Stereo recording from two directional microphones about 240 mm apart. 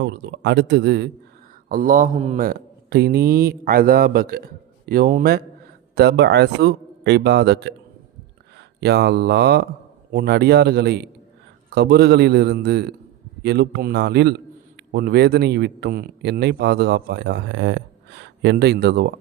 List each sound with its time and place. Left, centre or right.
0.0 s speech: right
1.7 s speech: right